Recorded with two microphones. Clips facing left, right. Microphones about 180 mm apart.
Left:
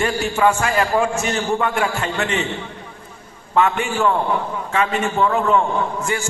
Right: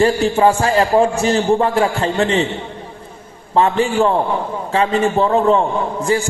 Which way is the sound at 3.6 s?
30° right (ahead or behind).